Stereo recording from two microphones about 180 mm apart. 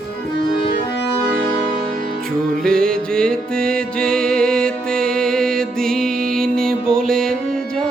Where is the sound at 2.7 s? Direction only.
5° left (ahead or behind).